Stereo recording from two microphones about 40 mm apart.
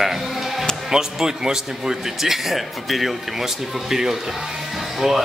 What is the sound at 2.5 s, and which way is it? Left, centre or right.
Speech, centre.